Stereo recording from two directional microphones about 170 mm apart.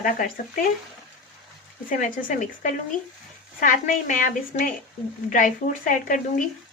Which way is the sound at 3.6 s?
50° left (ahead or behind).